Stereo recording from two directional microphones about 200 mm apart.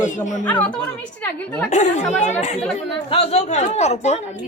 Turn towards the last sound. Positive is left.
turn(degrees=35)  # may be behind; listen again after turning